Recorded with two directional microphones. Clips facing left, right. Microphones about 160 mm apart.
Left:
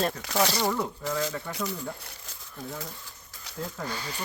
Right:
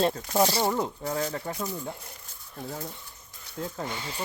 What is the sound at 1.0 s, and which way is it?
Speech, 90° left.